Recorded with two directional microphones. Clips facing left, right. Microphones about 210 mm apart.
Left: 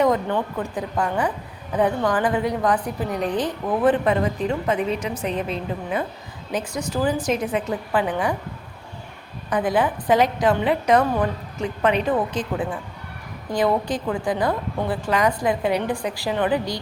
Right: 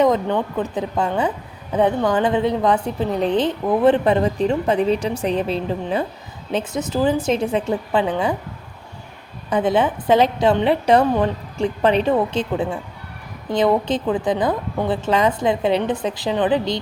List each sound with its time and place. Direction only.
0.0 s a woman's voice: 20° right (ahead or behind)
9.5 s a woman's voice: 25° right (ahead or behind)